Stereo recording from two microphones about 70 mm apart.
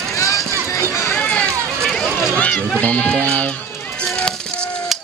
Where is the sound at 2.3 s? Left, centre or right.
Centre.